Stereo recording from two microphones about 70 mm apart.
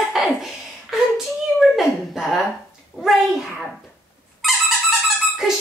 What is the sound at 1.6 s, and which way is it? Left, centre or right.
A child's voice, centre.